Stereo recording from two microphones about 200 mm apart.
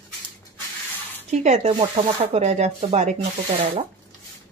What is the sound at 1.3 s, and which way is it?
Speech, 35° right (ahead or behind).